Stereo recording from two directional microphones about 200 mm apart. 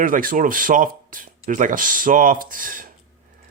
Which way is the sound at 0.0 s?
45° right (ahead or behind).